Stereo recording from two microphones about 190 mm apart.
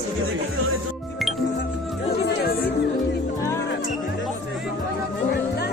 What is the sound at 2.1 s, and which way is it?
Speech, 55° left (ahead or behind).